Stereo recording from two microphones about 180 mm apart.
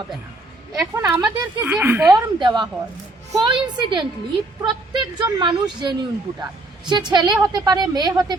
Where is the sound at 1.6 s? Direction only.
10° right (ahead or behind).